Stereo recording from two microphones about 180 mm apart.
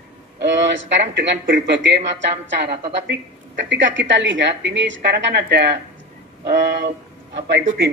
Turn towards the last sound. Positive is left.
turn(degrees=-85)